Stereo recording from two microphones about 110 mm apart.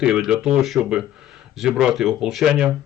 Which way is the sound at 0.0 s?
5° right (ahead or behind).